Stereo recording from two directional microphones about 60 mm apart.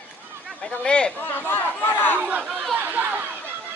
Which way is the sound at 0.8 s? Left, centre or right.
Centre.